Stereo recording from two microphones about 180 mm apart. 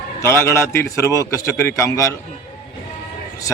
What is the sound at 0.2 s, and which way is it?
Speech, 15° left (ahead or behind).